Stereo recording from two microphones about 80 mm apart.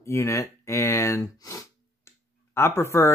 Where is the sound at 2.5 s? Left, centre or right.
Left.